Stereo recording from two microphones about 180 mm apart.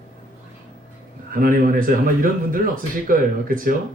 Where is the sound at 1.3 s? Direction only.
50° right (ahead or behind).